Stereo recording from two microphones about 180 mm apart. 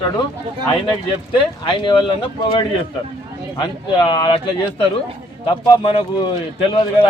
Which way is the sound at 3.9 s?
25° left (ahead or behind).